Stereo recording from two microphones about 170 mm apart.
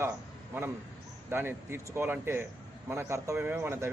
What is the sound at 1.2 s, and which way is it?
A man's voice, 15° right (ahead or behind).